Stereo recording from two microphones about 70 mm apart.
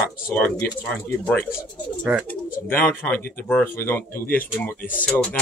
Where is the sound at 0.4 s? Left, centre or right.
Centre; by 4.2 s left.